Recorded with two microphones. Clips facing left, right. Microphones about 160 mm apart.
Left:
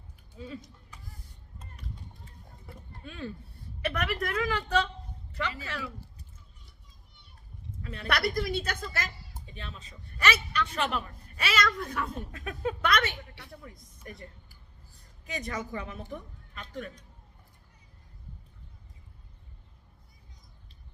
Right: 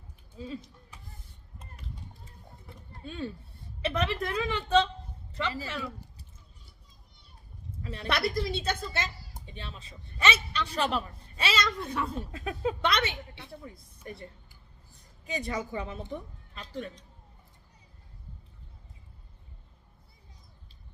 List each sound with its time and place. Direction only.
0.3 s a man's voice: 30° right (ahead or behind)
2.6 s a sound: 30° right (ahead or behind)
3.8 s a man's voice: 25° right (ahead or behind)
7.8 s a man's voice: 30° right (ahead or behind)
15.3 s a man's voice: 30° right (ahead or behind)